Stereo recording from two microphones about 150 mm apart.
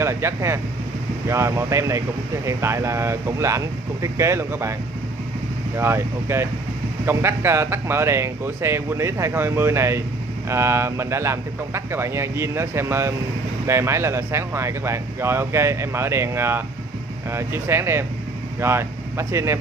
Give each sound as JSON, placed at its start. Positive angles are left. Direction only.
{"t": 0.0, "sound": "speech", "side_deg": -20}
{"t": 5.8, "sound": "speech", "side_deg": -15}